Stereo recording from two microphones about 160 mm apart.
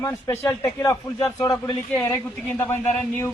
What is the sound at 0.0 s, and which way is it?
Speech, 20° left (ahead or behind).